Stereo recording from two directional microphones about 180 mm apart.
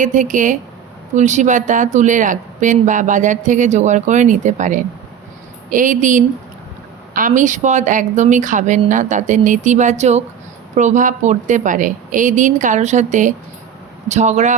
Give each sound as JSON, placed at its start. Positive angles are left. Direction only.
{"t": 0.0, "sound": "speech", "side_deg": -45}